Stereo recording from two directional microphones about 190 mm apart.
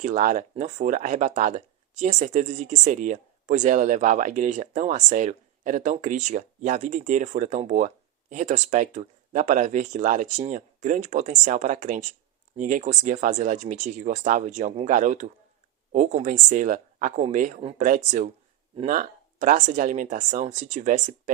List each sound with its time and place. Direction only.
0.0 s speech: 40° right (ahead or behind)